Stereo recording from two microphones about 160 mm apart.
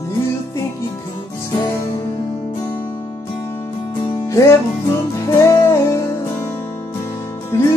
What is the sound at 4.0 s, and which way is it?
Music, 25° left (ahead or behind).